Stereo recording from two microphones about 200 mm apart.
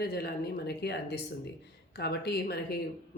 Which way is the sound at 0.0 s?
50° left (ahead or behind).